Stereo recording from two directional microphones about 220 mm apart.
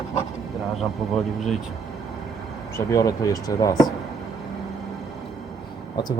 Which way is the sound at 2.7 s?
15° left (ahead or behind).